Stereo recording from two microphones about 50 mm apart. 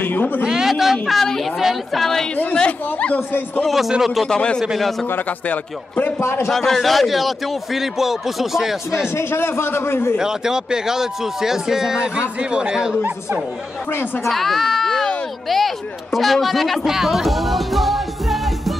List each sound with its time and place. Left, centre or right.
0.0 s a man's voice: left
0.4 s a man's voice: centre
1.2 s a woman's voice: centre
1.6 s a man's voice: centre
2.5 s speech: left
3.6 s a man's voice: centre
5.5 s a man's voice: left
6.5 s a man's voice: centre
9.1 s a man's voice: left
10.1 s a man's voice: centre
14.2 s speech: centre